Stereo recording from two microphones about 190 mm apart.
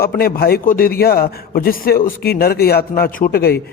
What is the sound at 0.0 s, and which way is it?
A man's voice, 55° left (ahead or behind).